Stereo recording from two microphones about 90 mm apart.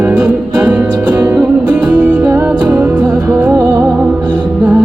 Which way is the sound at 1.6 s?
50° right (ahead or behind).